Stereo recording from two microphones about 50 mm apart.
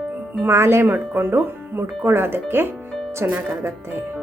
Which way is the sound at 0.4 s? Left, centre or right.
Right.